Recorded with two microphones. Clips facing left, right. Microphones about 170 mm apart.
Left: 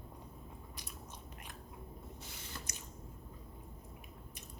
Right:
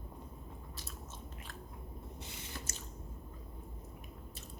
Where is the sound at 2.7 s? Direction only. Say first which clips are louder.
Right 2 dB; 15° left (ahead or behind).